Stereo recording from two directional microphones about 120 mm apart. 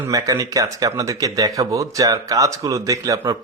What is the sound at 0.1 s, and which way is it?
A man's voice, 30° right (ahead or behind).